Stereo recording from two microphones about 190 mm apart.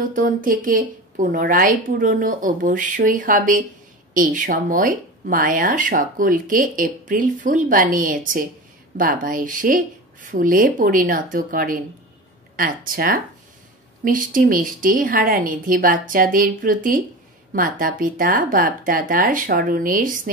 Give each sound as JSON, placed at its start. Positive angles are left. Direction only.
{"t": 0.0, "sound": "speech", "side_deg": -45}